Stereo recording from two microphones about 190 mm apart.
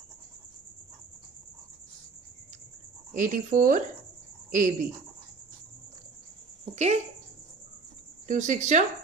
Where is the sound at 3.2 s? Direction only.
45° right (ahead or behind).